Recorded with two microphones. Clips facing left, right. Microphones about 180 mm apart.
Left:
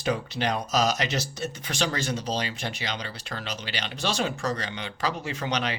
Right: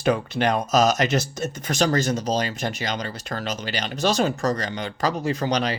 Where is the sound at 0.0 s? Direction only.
55° right (ahead or behind).